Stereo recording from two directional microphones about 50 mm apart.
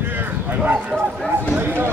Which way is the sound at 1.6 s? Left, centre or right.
Right.